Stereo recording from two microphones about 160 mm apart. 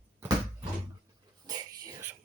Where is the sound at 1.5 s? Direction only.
25° right (ahead or behind).